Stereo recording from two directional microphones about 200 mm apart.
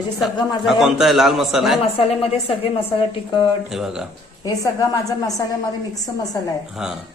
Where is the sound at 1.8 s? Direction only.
30° left (ahead or behind).